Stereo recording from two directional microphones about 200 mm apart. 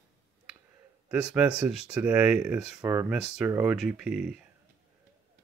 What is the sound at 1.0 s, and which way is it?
Speech, 5° right (ahead or behind).